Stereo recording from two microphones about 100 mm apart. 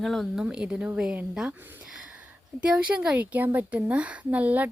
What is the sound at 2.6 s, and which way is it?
Speech, 10° right (ahead or behind).